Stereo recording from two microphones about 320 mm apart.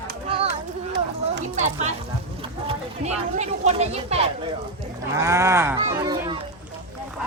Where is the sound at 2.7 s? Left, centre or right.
Right.